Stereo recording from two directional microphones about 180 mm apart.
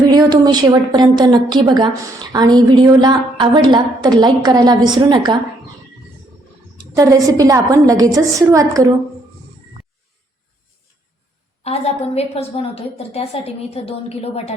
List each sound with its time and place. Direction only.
0.1 s a woman's voice: 25° right (ahead or behind)
6.9 s a woman's voice: 20° right (ahead or behind)
11.6 s a woman's voice: 35° left (ahead or behind)